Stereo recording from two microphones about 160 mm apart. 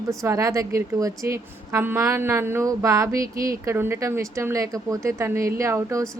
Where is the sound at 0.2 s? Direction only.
20° right (ahead or behind).